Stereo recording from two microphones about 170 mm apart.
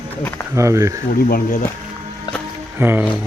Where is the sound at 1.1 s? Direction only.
55° left (ahead or behind).